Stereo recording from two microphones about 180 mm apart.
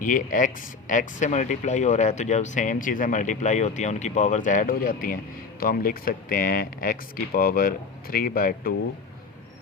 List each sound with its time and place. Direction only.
0.0 s speech: 45° left (ahead or behind)